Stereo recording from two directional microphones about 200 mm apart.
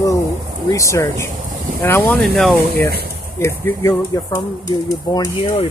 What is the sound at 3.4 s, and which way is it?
Speech, 15° left (ahead or behind).